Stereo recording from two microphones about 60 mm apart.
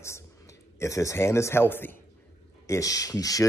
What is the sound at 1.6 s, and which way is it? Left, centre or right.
Speech, left.